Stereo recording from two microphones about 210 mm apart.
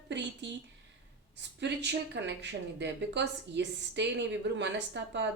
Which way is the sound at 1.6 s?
55° right (ahead or behind).